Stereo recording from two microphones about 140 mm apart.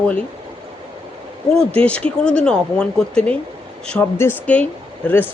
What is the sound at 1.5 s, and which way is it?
Speech, 10° left (ahead or behind).